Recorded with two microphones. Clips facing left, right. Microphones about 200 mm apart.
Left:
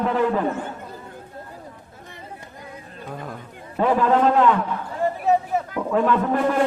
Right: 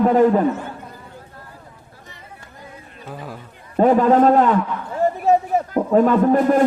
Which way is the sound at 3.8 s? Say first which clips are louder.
Right 5 dB; 40° right (ahead or behind).